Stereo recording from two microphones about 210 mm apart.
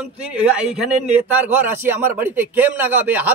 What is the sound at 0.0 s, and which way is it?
A man's voice, 5° right (ahead or behind).